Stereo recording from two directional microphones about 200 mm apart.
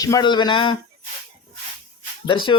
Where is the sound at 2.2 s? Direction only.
25° left (ahead or behind).